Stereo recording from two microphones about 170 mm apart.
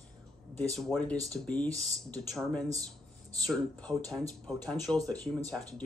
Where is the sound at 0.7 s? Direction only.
5° left (ahead or behind).